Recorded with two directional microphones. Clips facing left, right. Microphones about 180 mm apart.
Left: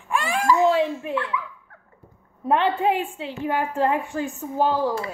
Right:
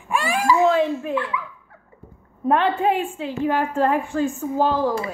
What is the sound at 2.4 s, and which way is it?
A woman's voice, 20° left (ahead or behind).